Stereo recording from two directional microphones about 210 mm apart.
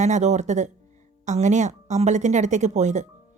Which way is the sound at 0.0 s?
35° right (ahead or behind).